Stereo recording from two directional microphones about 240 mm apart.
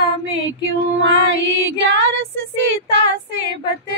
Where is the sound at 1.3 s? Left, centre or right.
Right.